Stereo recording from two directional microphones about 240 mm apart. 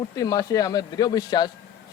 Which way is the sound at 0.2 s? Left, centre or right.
Centre.